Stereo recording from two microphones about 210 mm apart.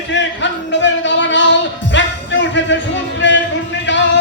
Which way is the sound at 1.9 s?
60° left (ahead or behind).